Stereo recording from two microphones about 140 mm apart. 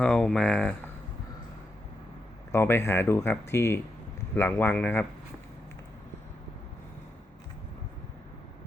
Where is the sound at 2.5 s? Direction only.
15° left (ahead or behind).